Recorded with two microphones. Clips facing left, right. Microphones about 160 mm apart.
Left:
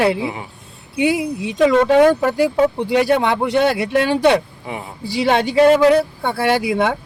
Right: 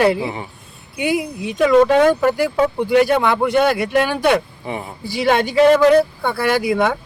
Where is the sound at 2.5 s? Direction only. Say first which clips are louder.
Right 1 dB; 25° left (ahead or behind).